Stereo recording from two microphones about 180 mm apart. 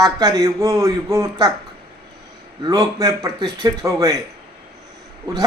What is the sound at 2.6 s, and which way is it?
A man's voice, 20° right (ahead or behind).